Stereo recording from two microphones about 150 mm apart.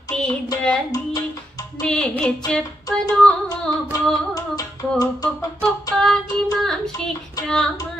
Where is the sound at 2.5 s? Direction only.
5° left (ahead or behind).